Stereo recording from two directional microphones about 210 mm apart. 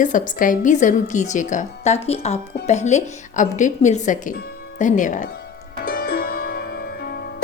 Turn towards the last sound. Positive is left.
turn(degrees=45)  # may be behind; listen again after turning